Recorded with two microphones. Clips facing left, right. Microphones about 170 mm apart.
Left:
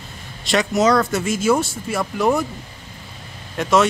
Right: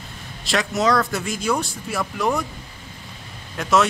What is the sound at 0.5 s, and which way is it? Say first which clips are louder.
Speech: left 4 dB; centre (ahead or behind).